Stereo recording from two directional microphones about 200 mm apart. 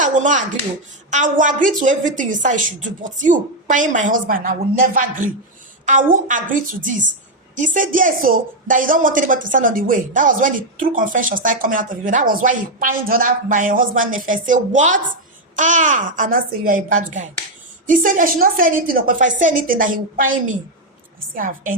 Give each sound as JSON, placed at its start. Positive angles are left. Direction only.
{"t": 0.0, "sound": "a woman's voice", "side_deg": -40}
{"t": 21.3, "sound": "a woman's voice", "side_deg": -40}